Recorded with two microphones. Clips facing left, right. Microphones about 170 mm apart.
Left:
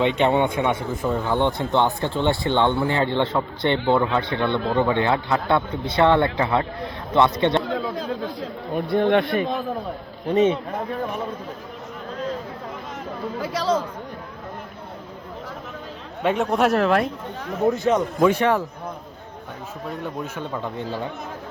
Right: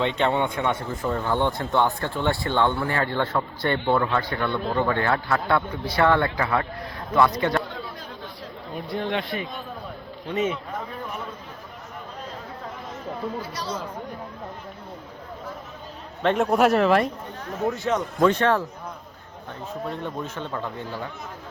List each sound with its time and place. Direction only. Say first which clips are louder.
0.0 s speech: left 4 dB; 15° left (ahead or behind)
8.7 s speech: left 9 dB; 55° left (ahead or behind)
10.2 s speech: left 7 dB; 35° left (ahead or behind)
13.4 s speech: left 9 dB; 90° left
16.2 s speech: even; centre (ahead or behind)
17.8 s a man's voice: left 1 dB; 10° left (ahead or behind)
20.2 s a man's voice: left 2 dB; 10° left (ahead or behind)
20.7 s speech: left 4 dB; 20° left (ahead or behind)